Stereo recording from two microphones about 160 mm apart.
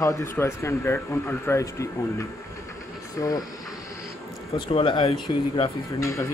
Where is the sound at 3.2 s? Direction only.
20° left (ahead or behind).